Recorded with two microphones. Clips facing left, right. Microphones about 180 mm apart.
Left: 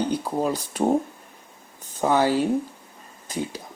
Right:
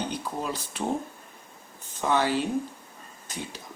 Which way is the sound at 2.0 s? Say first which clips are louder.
Left 5 dB; 40° left (ahead or behind).